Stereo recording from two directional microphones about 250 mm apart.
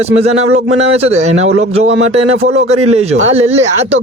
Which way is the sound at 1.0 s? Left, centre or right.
Right.